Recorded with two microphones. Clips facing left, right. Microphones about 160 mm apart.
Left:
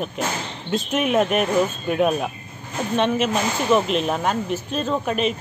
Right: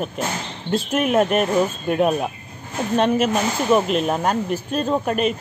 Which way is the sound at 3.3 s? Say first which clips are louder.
Right 1 dB; 5° right (ahead or behind).